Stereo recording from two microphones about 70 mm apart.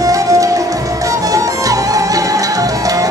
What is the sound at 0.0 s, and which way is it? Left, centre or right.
Music, right.